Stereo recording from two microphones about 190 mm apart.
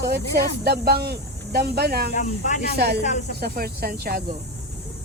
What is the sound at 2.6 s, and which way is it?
Speech, 60° right (ahead or behind).